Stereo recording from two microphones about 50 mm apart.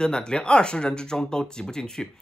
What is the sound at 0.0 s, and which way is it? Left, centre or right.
Speech, centre.